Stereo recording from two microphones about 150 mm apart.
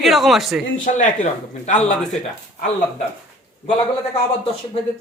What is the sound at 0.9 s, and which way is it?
Speech, 50° left (ahead or behind).